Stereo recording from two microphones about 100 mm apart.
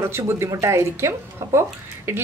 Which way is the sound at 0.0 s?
25° right (ahead or behind).